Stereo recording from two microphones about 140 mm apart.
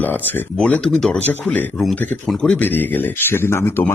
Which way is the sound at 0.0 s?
15° left (ahead or behind).